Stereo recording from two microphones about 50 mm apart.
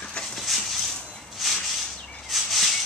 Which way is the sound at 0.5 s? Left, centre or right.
Centre.